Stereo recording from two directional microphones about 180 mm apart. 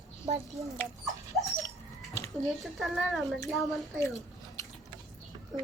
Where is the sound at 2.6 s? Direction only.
Centre (ahead or behind).